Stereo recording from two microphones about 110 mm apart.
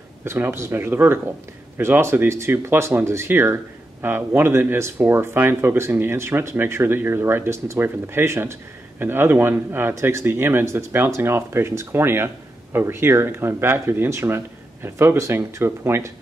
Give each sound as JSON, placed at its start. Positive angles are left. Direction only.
{"t": 0.2, "sound": "speech", "side_deg": -20}